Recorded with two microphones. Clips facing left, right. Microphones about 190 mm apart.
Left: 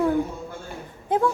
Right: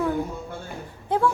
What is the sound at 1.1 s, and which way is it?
Speech, 20° left (ahead or behind).